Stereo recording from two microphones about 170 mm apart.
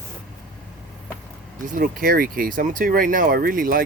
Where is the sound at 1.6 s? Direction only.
50° right (ahead or behind).